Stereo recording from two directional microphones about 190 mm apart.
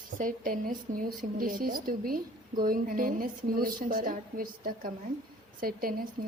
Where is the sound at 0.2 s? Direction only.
45° right (ahead or behind).